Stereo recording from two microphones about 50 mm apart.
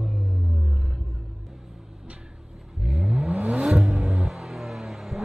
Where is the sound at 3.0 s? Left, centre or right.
Right.